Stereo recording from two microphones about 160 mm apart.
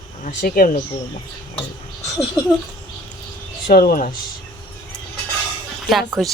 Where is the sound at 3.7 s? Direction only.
65° left (ahead or behind).